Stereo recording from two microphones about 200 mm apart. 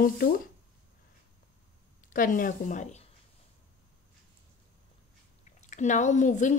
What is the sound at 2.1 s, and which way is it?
Speech, 40° left (ahead or behind).